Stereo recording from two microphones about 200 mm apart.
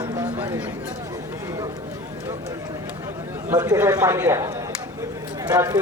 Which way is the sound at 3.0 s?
15° right (ahead or behind).